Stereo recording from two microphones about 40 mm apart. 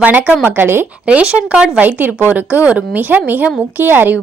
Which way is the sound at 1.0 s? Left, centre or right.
Right.